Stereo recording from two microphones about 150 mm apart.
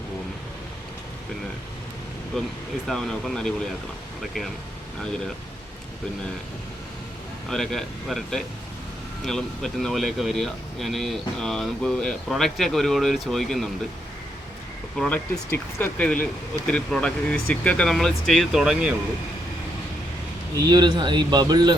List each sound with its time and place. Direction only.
2.3 s speech: 5° left (ahead or behind)
7.5 s speech: centre (ahead or behind)
14.9 s speech: 5° left (ahead or behind)
20.7 s speech: 30° right (ahead or behind)